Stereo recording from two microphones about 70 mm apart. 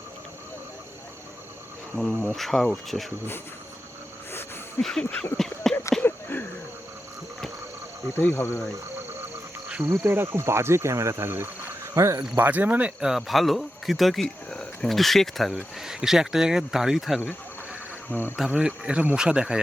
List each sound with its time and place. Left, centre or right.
2.0 s speech: centre
4.8 s a sound: centre
6.0 s a sound: left
8.1 s cricket: left
9.8 s speech: right
12.4 s speech: right
13.0 s speech: centre
18.1 s cricket: left
18.3 s speech: centre